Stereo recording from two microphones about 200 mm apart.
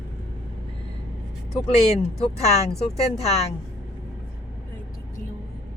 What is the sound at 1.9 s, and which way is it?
Speech, 30° left (ahead or behind).